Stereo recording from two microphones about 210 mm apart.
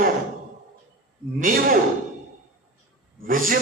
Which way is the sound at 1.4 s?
40° right (ahead or behind).